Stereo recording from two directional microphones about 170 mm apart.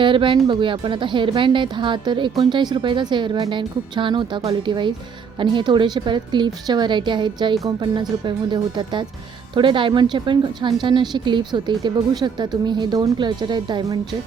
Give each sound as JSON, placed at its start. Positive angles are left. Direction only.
{"t": 0.0, "sound": "speech", "side_deg": -30}